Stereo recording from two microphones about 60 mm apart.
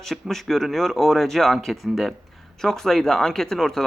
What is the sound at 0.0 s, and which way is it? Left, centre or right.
Speech, centre.